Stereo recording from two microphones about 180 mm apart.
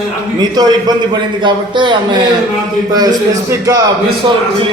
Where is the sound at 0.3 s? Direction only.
20° right (ahead or behind).